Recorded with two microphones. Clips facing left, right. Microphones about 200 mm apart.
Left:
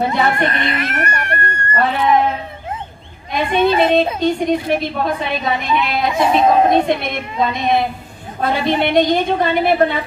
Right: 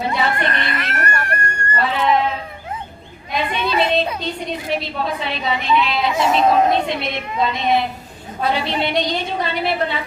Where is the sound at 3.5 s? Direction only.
50° left (ahead or behind).